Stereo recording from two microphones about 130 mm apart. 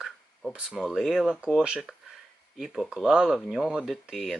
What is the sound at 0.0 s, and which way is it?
Speech, centre (ahead or behind).